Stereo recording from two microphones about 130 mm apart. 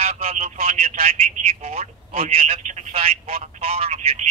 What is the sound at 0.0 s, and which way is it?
Speech, 55° right (ahead or behind).